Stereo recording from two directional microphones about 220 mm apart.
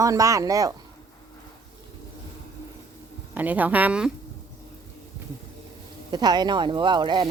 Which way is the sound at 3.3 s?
10° right (ahead or behind).